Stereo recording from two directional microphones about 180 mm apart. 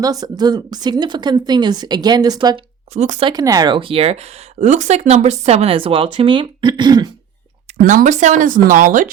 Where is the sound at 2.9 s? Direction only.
40° right (ahead or behind).